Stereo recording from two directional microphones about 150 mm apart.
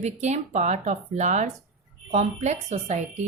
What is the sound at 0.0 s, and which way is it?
A woman's voice, 50° right (ahead or behind).